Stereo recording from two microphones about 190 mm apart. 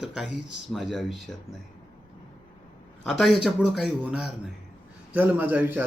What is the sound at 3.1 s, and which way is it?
Speech, centre (ahead or behind).